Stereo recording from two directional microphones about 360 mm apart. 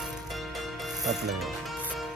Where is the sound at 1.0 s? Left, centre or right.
Centre.